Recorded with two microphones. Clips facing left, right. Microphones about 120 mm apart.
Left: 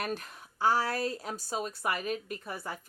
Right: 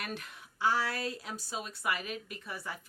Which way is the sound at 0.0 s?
40° left (ahead or behind).